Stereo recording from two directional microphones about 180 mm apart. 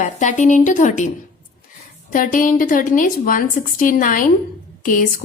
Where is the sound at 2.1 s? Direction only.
50° left (ahead or behind).